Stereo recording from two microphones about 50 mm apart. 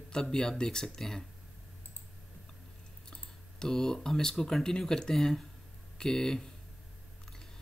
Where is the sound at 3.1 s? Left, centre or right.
Centre.